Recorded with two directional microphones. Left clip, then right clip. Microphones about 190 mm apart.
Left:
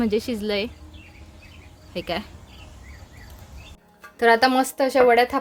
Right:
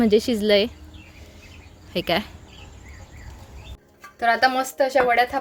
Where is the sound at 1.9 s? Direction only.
35° right (ahead or behind).